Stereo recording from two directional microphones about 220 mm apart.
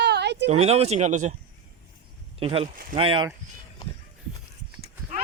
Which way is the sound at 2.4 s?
25° right (ahead or behind).